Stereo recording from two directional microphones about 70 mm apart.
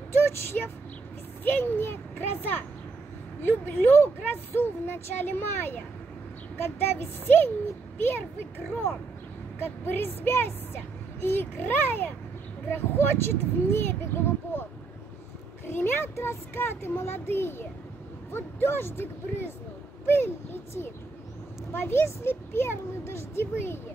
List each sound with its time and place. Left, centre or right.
0.2 s speech: left